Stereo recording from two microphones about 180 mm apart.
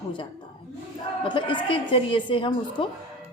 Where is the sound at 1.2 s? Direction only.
25° left (ahead or behind).